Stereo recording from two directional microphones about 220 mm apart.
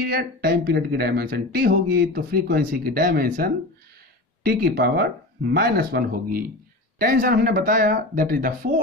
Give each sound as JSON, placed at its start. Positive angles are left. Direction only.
{"t": 0.0, "sound": "speech", "side_deg": -45}